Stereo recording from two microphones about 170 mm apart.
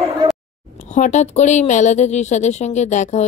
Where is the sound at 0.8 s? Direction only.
45° left (ahead or behind).